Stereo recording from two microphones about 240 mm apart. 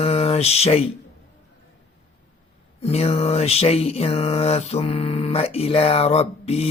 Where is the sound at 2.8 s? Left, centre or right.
Left.